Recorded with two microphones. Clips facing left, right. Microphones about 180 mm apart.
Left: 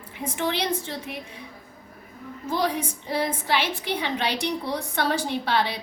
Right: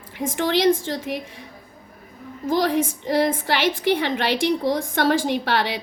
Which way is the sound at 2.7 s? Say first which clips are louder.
Right 7 dB; 90° right.